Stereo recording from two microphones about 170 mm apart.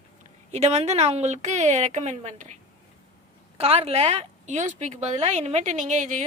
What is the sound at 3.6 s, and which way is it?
Speech, 35° right (ahead or behind).